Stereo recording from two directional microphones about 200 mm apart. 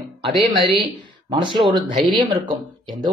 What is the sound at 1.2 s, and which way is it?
Speech, 25° right (ahead or behind).